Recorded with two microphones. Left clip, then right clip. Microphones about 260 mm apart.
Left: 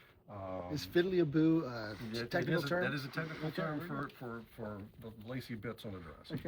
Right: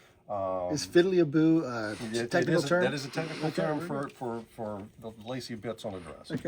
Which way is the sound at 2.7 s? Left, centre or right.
Right.